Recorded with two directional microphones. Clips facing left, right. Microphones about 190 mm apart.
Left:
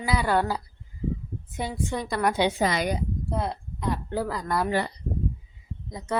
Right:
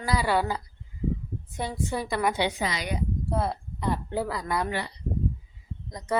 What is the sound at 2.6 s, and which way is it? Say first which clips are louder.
Speech: left 5 dB; 50° left (ahead or behind).